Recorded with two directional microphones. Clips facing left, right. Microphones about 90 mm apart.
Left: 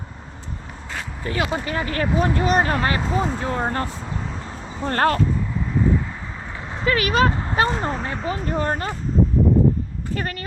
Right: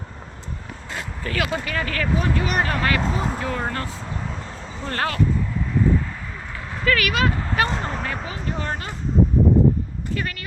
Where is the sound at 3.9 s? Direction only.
Centre (ahead or behind).